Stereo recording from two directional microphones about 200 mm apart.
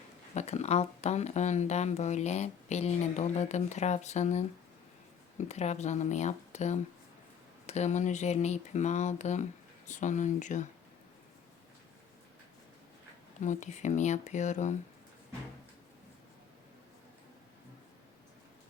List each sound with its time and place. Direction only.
0.3 s speech: 35° left (ahead or behind)
5.5 s speech: 35° left (ahead or behind)
13.4 s speech: 35° left (ahead or behind)